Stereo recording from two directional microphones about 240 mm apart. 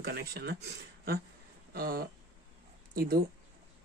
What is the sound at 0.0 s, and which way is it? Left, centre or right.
Speech, right.